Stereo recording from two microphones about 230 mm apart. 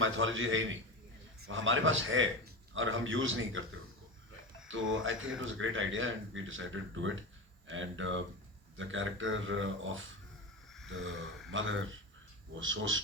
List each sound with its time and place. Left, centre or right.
0.0 s a man's voice: right
4.7 s a man's voice: right
10.8 s a sound: right
11.5 s a man's voice: right